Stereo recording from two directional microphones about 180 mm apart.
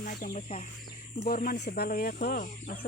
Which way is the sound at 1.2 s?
55° left (ahead or behind).